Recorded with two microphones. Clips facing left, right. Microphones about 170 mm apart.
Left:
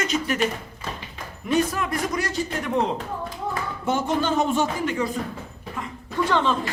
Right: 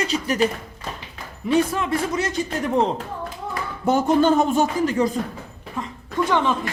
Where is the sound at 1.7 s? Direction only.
25° right (ahead or behind).